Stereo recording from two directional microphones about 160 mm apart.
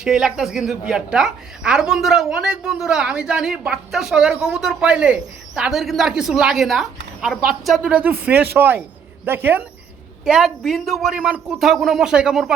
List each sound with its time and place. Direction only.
0.0 s a woman's voice: 5° right (ahead or behind)